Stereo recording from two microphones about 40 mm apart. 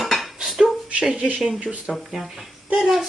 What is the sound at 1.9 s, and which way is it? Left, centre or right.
A woman's voice, centre.